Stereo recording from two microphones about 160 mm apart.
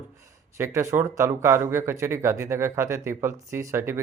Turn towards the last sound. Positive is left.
turn(degrees=-15)  # may be behind; listen again after turning